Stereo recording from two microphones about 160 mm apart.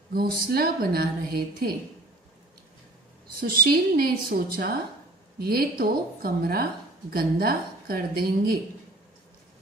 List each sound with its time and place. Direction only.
0.1 s a woman's voice: 70° right (ahead or behind)
3.3 s a woman's voice: 65° right (ahead or behind)